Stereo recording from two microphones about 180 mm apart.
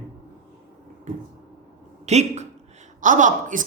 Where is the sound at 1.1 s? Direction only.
45° right (ahead or behind).